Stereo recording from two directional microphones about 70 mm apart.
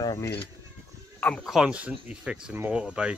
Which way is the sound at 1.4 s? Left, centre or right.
Centre.